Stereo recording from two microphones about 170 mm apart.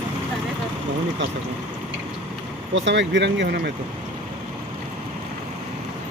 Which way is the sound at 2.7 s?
90° right.